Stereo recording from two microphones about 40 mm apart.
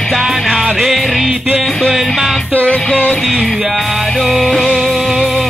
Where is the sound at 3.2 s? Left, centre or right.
Centre.